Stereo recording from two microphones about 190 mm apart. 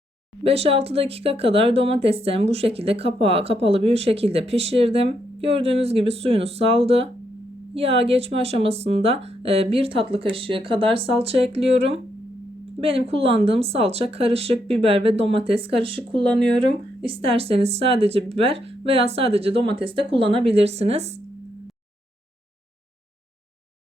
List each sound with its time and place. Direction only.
0.4 s speech: 30° right (ahead or behind)